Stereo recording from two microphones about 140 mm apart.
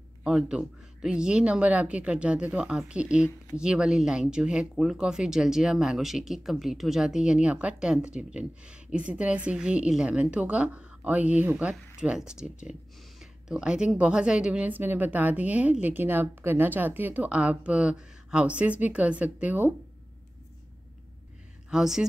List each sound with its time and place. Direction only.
0.2 s speech: 5° right (ahead or behind)
21.6 s speech: 5° right (ahead or behind)